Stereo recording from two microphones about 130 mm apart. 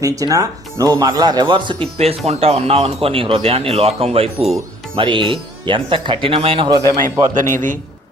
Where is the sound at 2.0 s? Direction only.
55° right (ahead or behind).